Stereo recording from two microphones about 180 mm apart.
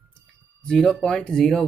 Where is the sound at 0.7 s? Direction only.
Centre (ahead or behind).